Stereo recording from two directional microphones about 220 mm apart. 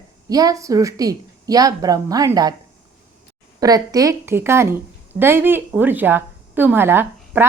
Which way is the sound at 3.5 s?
15° right (ahead or behind).